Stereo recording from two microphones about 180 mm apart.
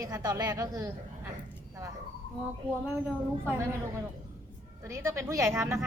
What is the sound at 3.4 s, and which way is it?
Speech, 10° right (ahead or behind).